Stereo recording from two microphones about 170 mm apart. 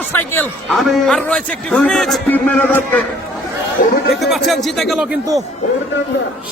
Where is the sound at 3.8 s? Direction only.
50° left (ahead or behind).